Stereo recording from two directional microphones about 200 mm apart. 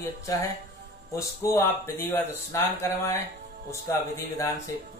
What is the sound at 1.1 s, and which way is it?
Speech, 15° left (ahead or behind).